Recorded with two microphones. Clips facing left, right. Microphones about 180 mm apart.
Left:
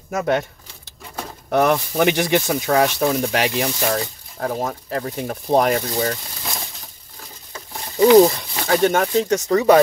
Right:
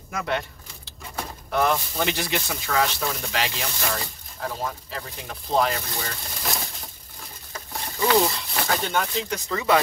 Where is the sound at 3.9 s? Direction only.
45° left (ahead or behind).